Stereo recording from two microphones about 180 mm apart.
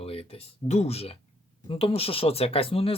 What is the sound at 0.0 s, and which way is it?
Speech, 35° left (ahead or behind).